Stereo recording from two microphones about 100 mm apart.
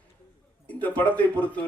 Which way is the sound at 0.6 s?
15° left (ahead or behind).